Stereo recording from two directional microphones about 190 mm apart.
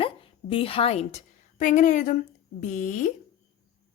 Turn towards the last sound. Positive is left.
turn(degrees=40)  # may be behind; listen again after turning